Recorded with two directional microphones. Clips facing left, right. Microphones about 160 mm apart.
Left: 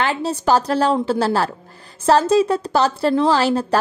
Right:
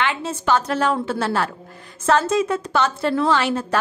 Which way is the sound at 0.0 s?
35° left (ahead or behind).